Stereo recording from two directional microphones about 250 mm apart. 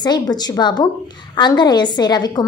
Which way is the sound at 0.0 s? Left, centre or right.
Centre.